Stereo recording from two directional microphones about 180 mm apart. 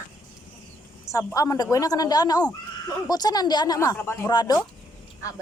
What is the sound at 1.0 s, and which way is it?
A woman's voice, 15° left (ahead or behind).